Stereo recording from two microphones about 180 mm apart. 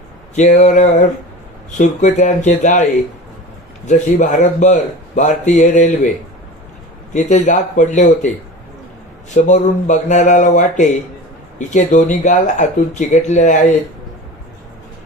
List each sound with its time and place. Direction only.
0.3 s mantra: 40° left (ahead or behind)
1.8 s speech: 40° left (ahead or behind)
3.8 s speech: 45° left (ahead or behind)
7.1 s speech: 40° left (ahead or behind)
9.3 s speech: 40° left (ahead or behind)